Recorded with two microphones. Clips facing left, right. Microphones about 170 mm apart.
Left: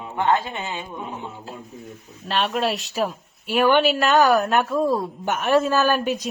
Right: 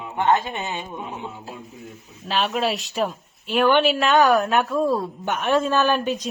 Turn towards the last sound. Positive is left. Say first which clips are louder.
# even
turn(degrees=5)  # may be behind; listen again after turning